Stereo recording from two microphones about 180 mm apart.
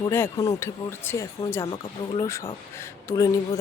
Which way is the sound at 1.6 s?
30° left (ahead or behind).